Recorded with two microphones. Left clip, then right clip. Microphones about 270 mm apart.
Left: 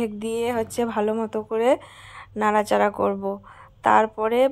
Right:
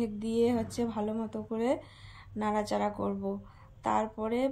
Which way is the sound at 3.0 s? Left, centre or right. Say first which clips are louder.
Left 11 dB; left.